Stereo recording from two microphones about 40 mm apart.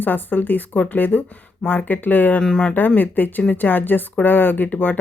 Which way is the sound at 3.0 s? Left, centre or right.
Left.